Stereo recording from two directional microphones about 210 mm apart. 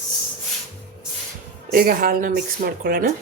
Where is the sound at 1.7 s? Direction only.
45° right (ahead or behind).